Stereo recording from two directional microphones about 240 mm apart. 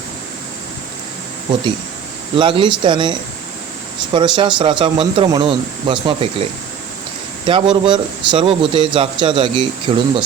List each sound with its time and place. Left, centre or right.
2.3 s speech: right